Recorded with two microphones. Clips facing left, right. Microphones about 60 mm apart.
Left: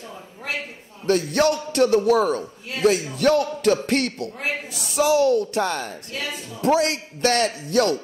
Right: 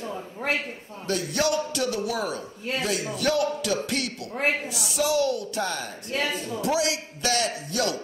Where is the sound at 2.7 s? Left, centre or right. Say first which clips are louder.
Right 3 dB; right.